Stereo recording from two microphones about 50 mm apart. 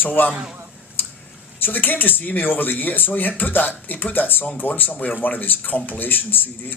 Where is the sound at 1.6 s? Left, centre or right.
Left.